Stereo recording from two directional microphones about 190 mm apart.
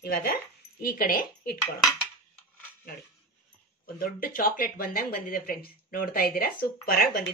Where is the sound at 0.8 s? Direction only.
50° left (ahead or behind).